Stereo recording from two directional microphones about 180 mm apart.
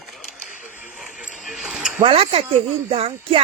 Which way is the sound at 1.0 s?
Centre (ahead or behind).